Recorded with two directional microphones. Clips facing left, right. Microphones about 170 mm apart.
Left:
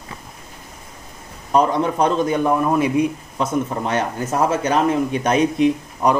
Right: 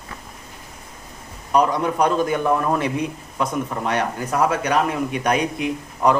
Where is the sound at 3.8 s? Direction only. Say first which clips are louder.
Left 1 dB; 25° left (ahead or behind).